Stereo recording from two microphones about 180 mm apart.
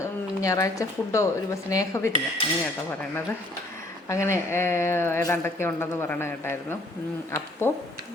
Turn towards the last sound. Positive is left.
turn(degrees=15)  # may be behind; listen again after turning